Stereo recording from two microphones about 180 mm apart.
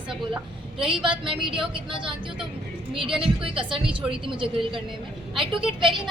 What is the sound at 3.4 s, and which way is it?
A woman's voice, 30° right (ahead or behind).